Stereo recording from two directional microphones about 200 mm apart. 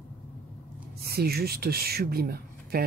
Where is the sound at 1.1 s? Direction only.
50° right (ahead or behind).